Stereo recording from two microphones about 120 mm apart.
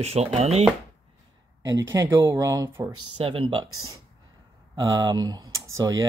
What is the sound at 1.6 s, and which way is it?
Speech, 30° right (ahead or behind).